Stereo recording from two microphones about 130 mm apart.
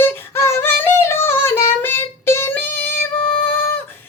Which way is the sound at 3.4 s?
15° left (ahead or behind).